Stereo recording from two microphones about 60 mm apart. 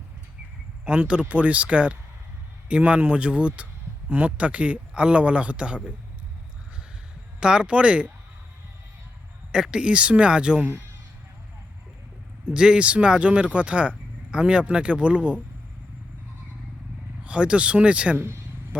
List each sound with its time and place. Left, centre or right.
0.9 s speech: centre
7.3 s speech: centre
9.7 s speech: centre
12.5 s speech: centre
17.2 s speech: centre